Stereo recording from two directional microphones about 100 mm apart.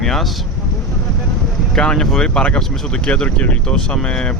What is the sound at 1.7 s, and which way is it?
Speech, 5° left (ahead or behind).